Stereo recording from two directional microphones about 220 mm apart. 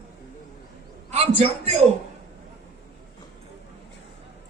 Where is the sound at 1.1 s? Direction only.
30° right (ahead or behind).